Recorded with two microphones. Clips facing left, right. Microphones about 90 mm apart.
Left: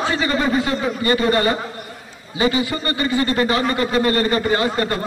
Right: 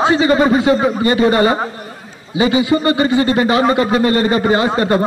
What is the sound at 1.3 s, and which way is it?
A man's voice, 20° right (ahead or behind).